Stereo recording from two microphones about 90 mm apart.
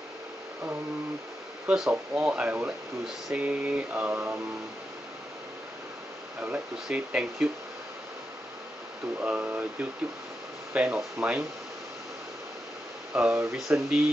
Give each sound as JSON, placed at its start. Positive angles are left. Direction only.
{"t": 1.7, "sound": "speech", "side_deg": -15}
{"t": 3.3, "sound": "mantra", "side_deg": -15}
{"t": 6.4, "sound": "speech", "side_deg": -15}
{"t": 9.2, "sound": "speech", "side_deg": -20}
{"t": 13.1, "sound": "speech", "side_deg": -10}